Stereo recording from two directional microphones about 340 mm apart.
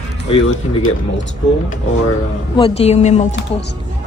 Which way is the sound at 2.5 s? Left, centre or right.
Centre.